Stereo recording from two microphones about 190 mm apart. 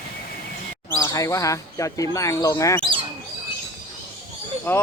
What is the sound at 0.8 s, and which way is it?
Speech, 15° left (ahead or behind).